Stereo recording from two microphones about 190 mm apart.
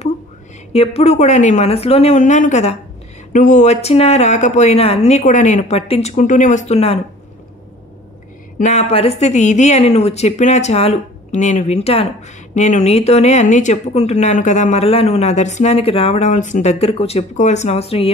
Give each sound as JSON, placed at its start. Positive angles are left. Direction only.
{"t": 0.7, "sound": "speech", "side_deg": 35}
{"t": 8.5, "sound": "speech", "side_deg": 40}